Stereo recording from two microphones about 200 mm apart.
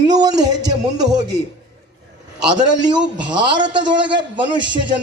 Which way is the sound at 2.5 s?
20° right (ahead or behind).